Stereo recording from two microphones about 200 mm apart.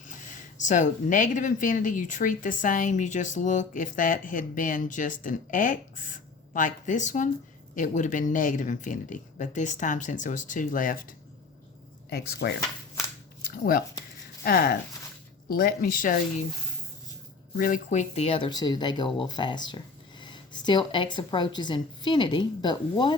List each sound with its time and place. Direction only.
0.6 s speech: 40° left (ahead or behind)
12.1 s speech: 55° left (ahead or behind)
13.4 s a sound: 45° left (ahead or behind)
14.4 s speech: 45° left (ahead or behind)
17.6 s a woman's voice: 40° left (ahead or behind); by 23.1 s 20° left (ahead or behind)